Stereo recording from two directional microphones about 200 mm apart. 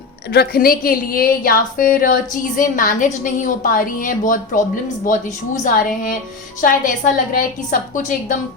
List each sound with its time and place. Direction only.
0.3 s a woman's voice: 50° left (ahead or behind)